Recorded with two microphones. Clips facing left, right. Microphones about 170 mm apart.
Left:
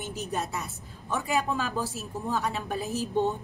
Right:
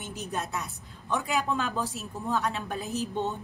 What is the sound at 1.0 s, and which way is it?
A woman's voice, 5° left (ahead or behind).